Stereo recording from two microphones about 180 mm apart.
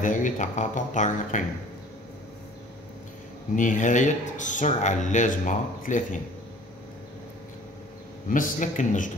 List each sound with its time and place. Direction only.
0.0 s speech: 45° left (ahead or behind)
3.5 s speech: 45° left (ahead or behind)
8.3 s speech: 45° left (ahead or behind)